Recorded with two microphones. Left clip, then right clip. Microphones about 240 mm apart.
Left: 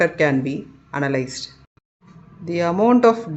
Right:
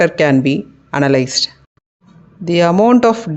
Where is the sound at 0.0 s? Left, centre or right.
Right.